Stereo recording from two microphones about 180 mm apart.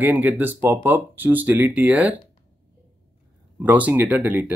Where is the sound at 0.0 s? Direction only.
10° right (ahead or behind).